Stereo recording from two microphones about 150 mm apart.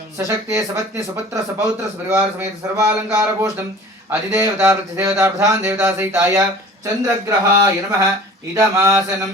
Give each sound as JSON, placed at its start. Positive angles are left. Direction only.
{"t": 0.2, "sound": "speech", "side_deg": -20}